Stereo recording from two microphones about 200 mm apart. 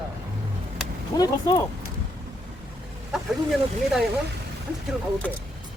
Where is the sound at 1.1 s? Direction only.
20° left (ahead or behind).